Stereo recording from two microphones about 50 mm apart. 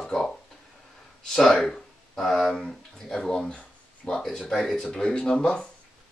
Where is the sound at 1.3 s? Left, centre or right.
Centre.